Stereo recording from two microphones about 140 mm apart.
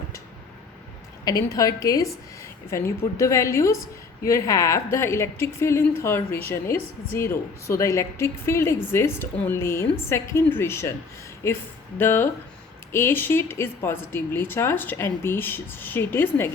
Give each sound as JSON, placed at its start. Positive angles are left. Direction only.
{"t": 1.2, "sound": "a woman's voice", "side_deg": 25}